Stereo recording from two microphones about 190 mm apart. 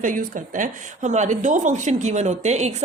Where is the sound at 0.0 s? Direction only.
45° right (ahead or behind).